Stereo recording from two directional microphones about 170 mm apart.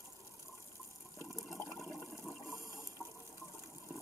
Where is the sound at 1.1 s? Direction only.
15° left (ahead or behind).